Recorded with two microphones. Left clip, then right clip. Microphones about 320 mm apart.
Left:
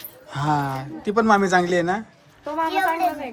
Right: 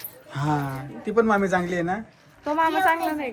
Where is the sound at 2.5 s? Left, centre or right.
Right.